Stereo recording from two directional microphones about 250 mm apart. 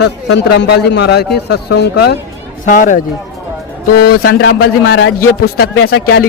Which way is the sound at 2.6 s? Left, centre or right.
Left.